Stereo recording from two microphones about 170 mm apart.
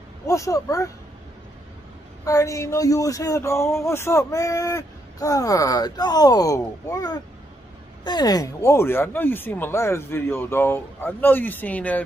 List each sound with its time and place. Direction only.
0.3 s speech: 20° left (ahead or behind)
2.2 s speech: 20° left (ahead or behind)